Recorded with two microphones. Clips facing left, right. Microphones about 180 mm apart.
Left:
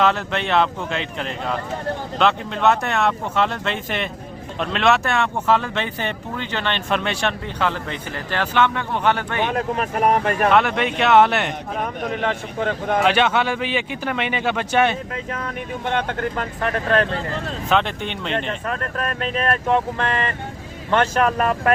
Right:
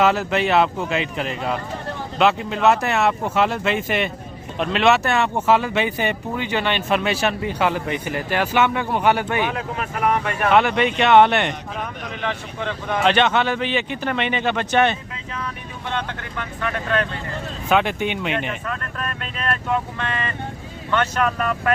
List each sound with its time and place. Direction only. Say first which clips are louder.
0.0 s speech: right 2 dB; 5° right (ahead or behind)
9.5 s speech: left 4 dB; 45° left (ahead or behind)
10.5 s speech: right 1 dB; centre (ahead or behind)
11.8 s speech: left 8 dB; 45° left (ahead or behind)
13.1 s speech: right 3 dB; 10° left (ahead or behind)
15.9 s speech: left 5 dB; 50° left (ahead or behind)
17.7 s speech: right 2 dB; 5° right (ahead or behind)
18.6 s speech: left 3 dB; 45° left (ahead or behind)
19.6 s speech: left 4 dB; 35° left (ahead or behind)